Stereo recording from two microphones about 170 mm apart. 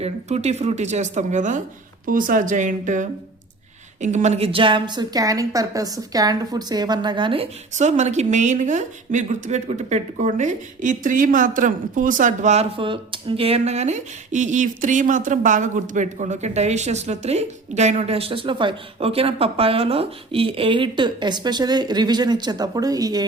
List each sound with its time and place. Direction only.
0.0 s a woman's voice: 40° right (ahead or behind)
7.8 s a woman's voice: 45° right (ahead or behind); by 23.2 s 20° right (ahead or behind)